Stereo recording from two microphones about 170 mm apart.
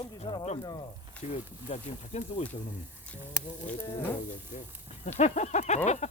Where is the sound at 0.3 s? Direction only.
25° left (ahead or behind).